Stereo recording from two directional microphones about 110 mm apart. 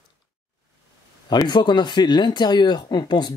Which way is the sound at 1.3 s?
40° left (ahead or behind).